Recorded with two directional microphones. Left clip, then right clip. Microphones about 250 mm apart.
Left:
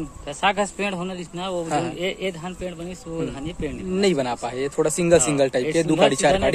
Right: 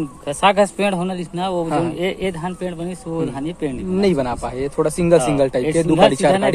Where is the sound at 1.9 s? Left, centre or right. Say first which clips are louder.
Right 4 dB; right.